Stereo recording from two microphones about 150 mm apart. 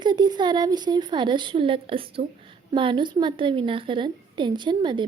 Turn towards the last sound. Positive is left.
turn(degrees=-30)  # may be behind; listen again after turning